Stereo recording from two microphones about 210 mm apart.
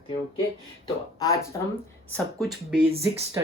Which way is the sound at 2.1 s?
Centre (ahead or behind).